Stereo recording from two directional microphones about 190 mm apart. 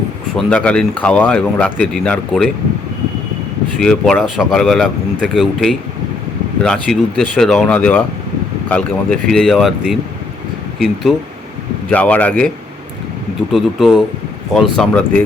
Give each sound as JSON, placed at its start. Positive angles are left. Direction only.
{"t": 0.3, "sound": "speech", "side_deg": 5}
{"t": 3.8, "sound": "speech", "side_deg": 0}
{"t": 13.5, "sound": "speech", "side_deg": 0}